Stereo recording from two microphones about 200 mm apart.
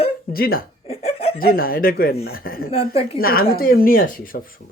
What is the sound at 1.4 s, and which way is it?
Speech, 50° left (ahead or behind).